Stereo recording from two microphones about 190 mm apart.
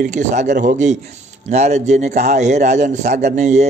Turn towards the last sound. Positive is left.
turn(degrees=-40)  # may be behind; listen again after turning